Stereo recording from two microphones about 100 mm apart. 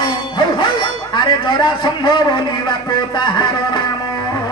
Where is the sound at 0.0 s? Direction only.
50° left (ahead or behind).